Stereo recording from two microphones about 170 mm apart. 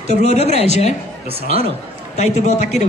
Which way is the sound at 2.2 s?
45° left (ahead or behind).